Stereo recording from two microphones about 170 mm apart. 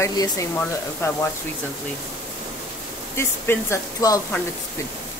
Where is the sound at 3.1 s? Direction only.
15° left (ahead or behind).